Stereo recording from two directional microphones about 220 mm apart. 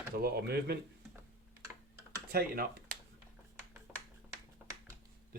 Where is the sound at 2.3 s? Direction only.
45° right (ahead or behind).